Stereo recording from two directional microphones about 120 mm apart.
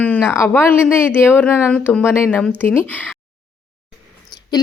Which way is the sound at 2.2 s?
5° left (ahead or behind).